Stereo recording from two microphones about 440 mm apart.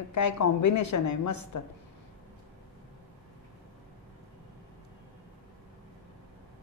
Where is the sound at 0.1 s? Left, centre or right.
Left.